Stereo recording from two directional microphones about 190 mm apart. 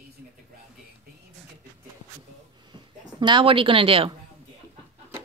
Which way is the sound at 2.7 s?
25° right (ahead or behind).